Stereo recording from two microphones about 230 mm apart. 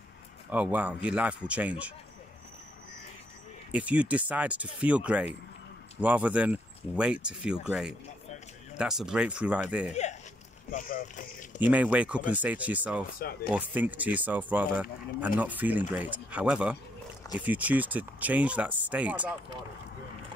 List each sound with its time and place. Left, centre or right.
0.5 s speech: centre
3.7 s speech: centre
8.7 s speech: centre
10.7 s speech: left
11.6 s speech: centre